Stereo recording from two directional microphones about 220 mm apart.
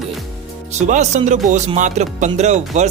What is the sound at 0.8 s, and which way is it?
Speech, 30° right (ahead or behind).